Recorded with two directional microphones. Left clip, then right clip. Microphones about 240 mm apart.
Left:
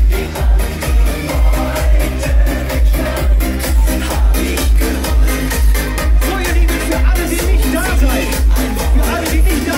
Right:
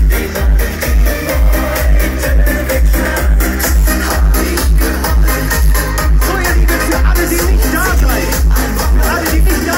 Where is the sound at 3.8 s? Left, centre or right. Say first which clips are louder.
Right 4 dB; centre.